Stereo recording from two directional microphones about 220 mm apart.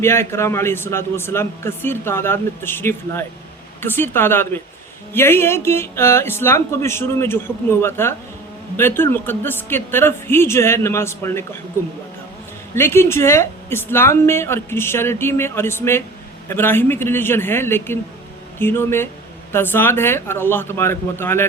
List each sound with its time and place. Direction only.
0.0 s speech: 10° left (ahead or behind)
12.7 s speech: 10° left (ahead or behind)